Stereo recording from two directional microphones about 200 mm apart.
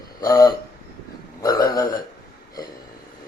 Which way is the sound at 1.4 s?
20° left (ahead or behind).